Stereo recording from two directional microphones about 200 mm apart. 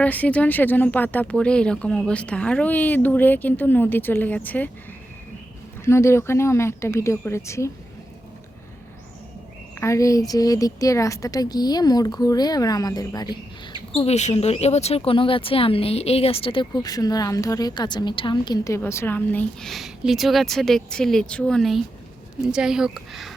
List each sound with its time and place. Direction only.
0.0 s speech: 5° left (ahead or behind)
5.8 s speech: 15° left (ahead or behind)
9.8 s speech: 15° left (ahead or behind)
13.9 s a woman's voice: 30° left (ahead or behind); by 23.3 s centre (ahead or behind)